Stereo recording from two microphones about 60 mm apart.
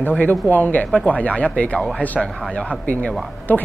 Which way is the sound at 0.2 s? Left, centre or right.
Left.